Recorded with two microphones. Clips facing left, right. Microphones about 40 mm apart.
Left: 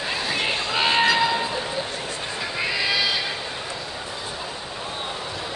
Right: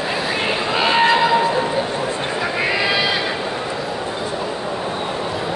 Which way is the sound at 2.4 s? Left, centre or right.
Centre.